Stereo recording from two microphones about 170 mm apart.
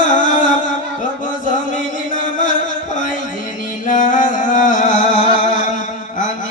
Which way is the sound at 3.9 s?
50° left (ahead or behind).